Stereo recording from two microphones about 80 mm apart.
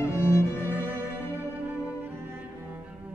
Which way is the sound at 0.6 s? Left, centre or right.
Right.